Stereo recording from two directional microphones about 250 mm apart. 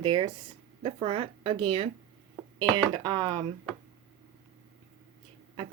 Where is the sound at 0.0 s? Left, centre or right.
Centre.